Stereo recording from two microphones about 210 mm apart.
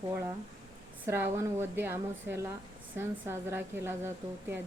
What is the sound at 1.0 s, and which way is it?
Speech, 10° right (ahead or behind).